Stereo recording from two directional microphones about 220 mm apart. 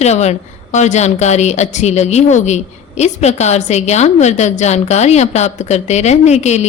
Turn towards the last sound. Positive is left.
turn(degrees=30)  # may be behind; listen again after turning